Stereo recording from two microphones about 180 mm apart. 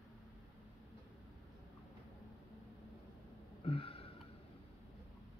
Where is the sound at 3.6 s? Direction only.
30° left (ahead or behind).